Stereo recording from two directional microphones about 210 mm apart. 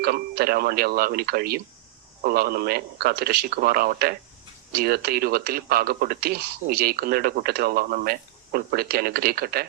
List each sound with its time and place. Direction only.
0.0 s speech: 45° right (ahead or behind)